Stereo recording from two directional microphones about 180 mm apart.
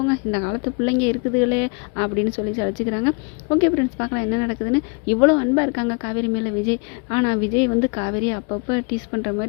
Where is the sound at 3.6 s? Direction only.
25° left (ahead or behind).